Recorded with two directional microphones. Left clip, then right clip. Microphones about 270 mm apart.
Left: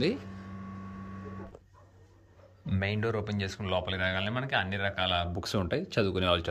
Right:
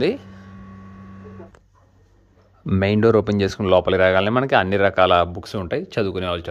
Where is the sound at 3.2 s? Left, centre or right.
Centre.